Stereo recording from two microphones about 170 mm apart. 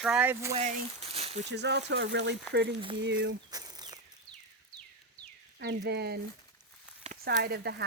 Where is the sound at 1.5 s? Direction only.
90° right.